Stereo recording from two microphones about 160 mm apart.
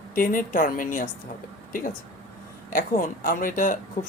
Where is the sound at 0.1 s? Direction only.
60° left (ahead or behind).